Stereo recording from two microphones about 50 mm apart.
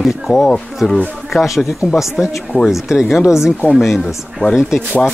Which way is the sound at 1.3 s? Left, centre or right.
Centre.